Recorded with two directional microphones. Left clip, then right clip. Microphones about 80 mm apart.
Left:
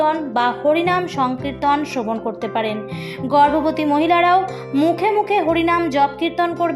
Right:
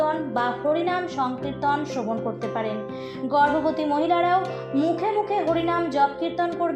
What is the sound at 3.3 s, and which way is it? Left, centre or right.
Speech, left.